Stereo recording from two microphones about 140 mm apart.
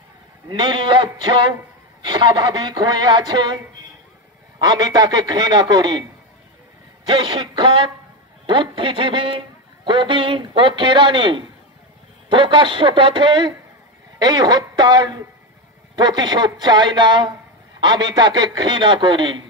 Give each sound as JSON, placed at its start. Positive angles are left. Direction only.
{"t": 0.5, "sound": "a man's voice", "side_deg": -35}
{"t": 4.6, "sound": "a man's voice", "side_deg": -30}
{"t": 7.1, "sound": "a man's voice", "side_deg": -35}